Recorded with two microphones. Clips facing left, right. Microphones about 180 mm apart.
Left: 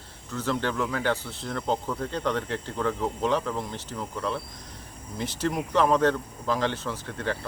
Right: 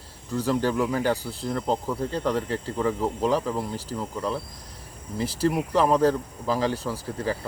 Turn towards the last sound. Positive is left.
turn(degrees=-5)  # may be behind; listen again after turning